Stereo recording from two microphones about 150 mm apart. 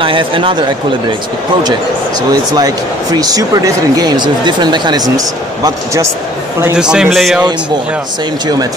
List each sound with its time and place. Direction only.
0.0 s speech: 35° right (ahead or behind)
2.5 s speech: 25° right (ahead or behind)
6.6 s a man's voice: 5° right (ahead or behind)